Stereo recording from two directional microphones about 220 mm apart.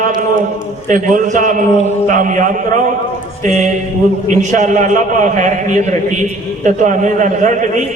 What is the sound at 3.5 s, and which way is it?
A man's voice, 30° right (ahead or behind).